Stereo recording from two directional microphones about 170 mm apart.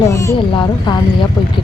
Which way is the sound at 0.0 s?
15° left (ahead or behind).